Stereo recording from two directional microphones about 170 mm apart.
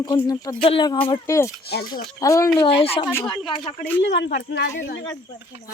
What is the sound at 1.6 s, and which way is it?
Speech, 70° left (ahead or behind).